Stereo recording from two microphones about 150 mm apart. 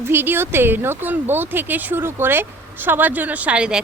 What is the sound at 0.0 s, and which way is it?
A woman's voice, 15° right (ahead or behind).